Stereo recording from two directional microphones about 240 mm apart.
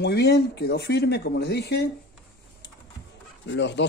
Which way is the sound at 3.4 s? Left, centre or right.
Left.